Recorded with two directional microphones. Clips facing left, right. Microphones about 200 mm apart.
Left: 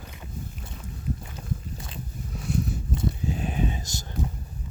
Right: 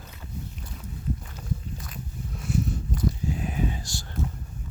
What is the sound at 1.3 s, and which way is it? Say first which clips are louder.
Biting: even; 30° left (ahead or behind).